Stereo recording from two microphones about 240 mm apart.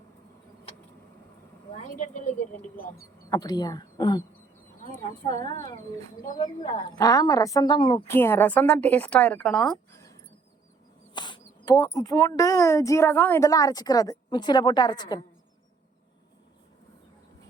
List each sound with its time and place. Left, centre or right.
1.7 s a woman's voice: left
2.6 s speech: centre
6.2 s speech: left
6.6 s speech: left; by 10.0 s centre
11.1 s speech: centre